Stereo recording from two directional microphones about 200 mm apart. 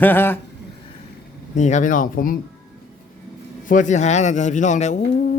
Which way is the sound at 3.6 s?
40° left (ahead or behind).